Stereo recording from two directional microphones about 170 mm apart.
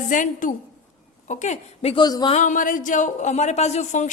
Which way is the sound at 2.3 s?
45° left (ahead or behind).